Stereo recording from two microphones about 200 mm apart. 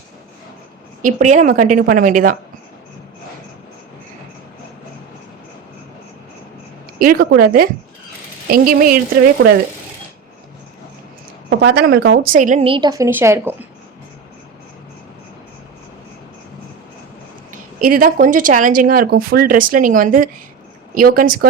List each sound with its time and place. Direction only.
1.0 s a woman's voice: 35° right (ahead or behind)
7.0 s speech: 50° right (ahead or behind)
11.4 s a woman's voice: 55° right (ahead or behind); by 12.6 s 40° right (ahead or behind)
12.6 s a woman's voice: 25° right (ahead or behind)
17.5 s speech: 45° right (ahead or behind)